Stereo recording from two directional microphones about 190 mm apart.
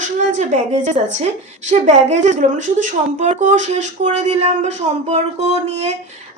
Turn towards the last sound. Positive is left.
turn(degrees=-35)  # may be behind; listen again after turning